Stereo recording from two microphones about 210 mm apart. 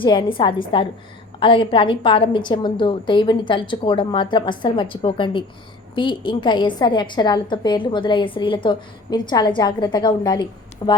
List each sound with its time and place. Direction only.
0.0 s a woman's voice: 20° left (ahead or behind)